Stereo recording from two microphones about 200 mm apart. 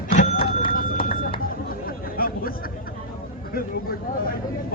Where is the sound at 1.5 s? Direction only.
45° left (ahead or behind).